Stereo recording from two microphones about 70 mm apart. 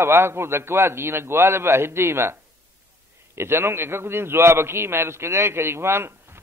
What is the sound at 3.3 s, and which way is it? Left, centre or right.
A man's voice, right.